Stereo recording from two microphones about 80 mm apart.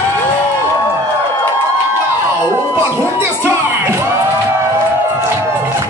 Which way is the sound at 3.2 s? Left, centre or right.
Right.